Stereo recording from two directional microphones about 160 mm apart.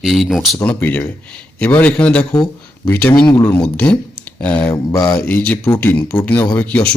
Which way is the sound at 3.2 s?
30° left (ahead or behind).